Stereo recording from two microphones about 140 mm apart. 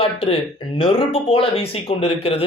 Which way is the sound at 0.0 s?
40° left (ahead or behind).